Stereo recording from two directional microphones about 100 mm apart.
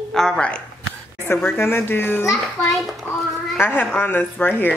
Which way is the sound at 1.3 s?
20° left (ahead or behind).